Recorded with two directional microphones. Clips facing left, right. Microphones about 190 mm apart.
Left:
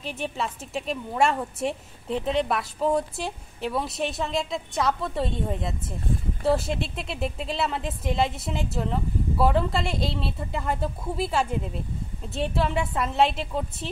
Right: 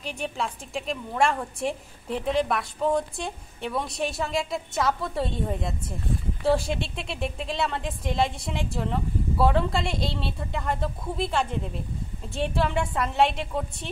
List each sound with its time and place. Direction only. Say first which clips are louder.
0.0 s a woman's voice: left 1 dB; centre (ahead or behind)